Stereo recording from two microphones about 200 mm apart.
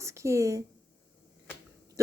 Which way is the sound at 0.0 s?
15° right (ahead or behind).